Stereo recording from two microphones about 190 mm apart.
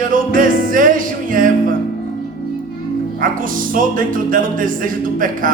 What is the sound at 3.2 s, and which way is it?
Speech, 45° right (ahead or behind).